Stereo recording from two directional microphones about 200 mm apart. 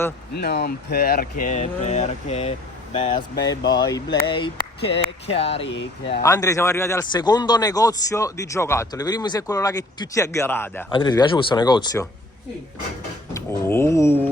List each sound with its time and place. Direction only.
0.3 s speech: 55° left (ahead or behind); by 3.2 s 30° left (ahead or behind)
3.7 s speech: 20° left (ahead or behind)
6.2 s a man's voice: 15° left (ahead or behind)
10.8 s speech: 20° left (ahead or behind)
13.3 s a man's voice: 10° left (ahead or behind)